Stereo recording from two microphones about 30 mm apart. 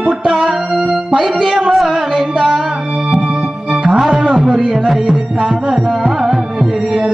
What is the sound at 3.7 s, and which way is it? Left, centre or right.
Music, centre.